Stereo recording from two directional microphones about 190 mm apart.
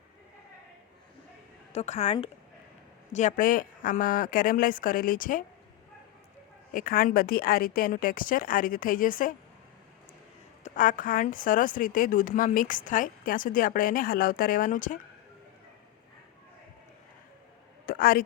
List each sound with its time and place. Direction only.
1.7 s speech: 35° left (ahead or behind)
6.7 s speech: 45° left (ahead or behind)
10.6 s speech: 45° left (ahead or behind)
17.8 s a sound: 50° left (ahead or behind)